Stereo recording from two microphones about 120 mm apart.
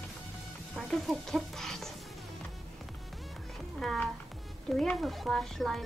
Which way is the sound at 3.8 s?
Centre (ahead or behind).